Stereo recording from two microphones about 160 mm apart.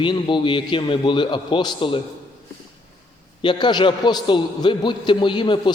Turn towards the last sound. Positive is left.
turn(degrees=30)  # may be behind; listen again after turning